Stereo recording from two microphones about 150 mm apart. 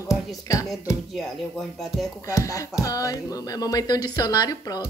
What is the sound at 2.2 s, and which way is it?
A woman's voice, 20° left (ahead or behind).